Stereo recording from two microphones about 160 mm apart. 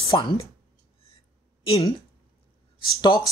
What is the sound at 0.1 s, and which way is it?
Speech, 35° left (ahead or behind).